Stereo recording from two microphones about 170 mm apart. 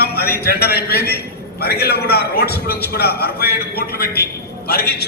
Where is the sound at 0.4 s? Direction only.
70° left (ahead or behind).